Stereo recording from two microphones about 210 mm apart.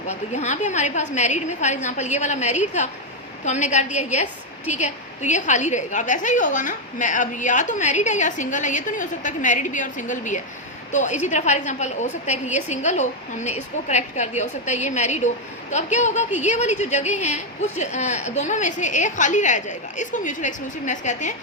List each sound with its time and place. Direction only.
0.1 s a woman's voice: 35° left (ahead or behind)